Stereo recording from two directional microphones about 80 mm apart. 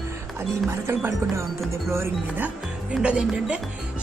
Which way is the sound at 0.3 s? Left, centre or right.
Right.